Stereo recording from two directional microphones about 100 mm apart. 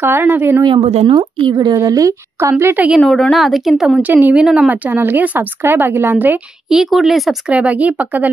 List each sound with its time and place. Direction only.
0.0 s speech: 20° right (ahead or behind)
0.7 s speech: 80° right
1.5 s a woman's voice: 45° right (ahead or behind)
2.6 s speech: 20° right (ahead or behind)
3.0 s speech: 5° left (ahead or behind)
4.0 s speech: 15° right (ahead or behind)
6.7 s speech: 5° right (ahead or behind)
7.5 s speech: 15° right (ahead or behind)